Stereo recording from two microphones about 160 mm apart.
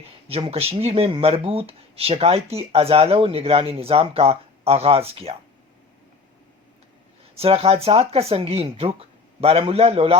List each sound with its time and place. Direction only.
0.3 s speech: 40° right (ahead or behind)
7.3 s speech: 40° right (ahead or behind)